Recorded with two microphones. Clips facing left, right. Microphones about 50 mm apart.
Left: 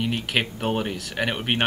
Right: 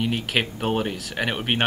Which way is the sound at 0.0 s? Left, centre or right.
Centre.